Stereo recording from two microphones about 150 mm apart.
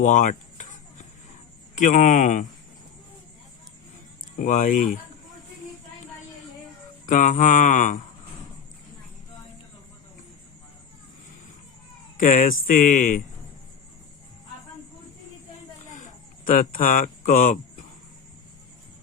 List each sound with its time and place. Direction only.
0.0 s a sound: 60° left (ahead or behind)
1.7 s speech: 55° left (ahead or behind)
4.4 s speech: 60° left (ahead or behind)
7.0 s speech: 55° left (ahead or behind)
12.1 s speech: 60° left (ahead or behind)
16.5 s speech: 65° left (ahead or behind)